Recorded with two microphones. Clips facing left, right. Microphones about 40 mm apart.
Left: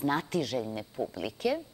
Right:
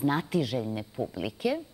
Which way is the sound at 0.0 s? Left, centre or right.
Centre.